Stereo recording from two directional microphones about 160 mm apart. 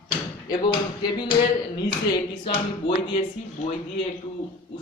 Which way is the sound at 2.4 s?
35° left (ahead or behind).